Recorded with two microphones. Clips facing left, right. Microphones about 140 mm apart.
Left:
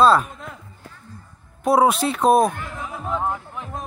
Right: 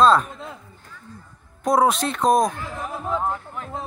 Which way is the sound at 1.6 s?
5° left (ahead or behind).